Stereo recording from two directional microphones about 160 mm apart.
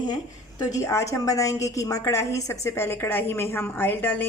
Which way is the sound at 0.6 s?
20° left (ahead or behind).